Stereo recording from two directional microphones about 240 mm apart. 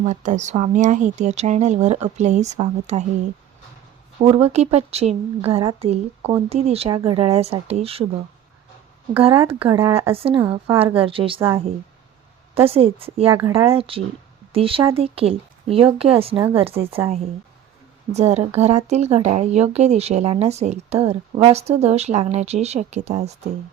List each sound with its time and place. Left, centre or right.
0.0 s speech: right
4.2 s speech: right
9.1 s speech: right
12.6 s speech: right
18.1 s speech: right